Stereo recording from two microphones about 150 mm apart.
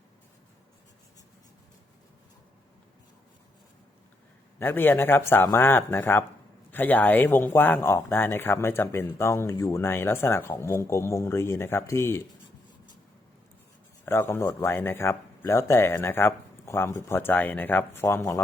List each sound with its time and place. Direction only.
4.6 s speech: 15° left (ahead or behind)
14.0 s speech: 15° left (ahead or behind)